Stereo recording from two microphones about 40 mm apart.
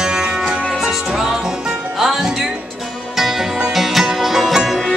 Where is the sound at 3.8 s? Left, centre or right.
Centre.